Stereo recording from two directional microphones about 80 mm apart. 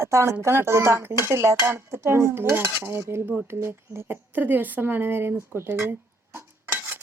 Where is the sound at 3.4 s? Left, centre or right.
Right.